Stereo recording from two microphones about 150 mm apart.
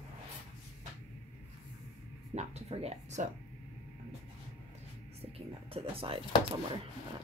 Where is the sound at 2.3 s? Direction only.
45° right (ahead or behind).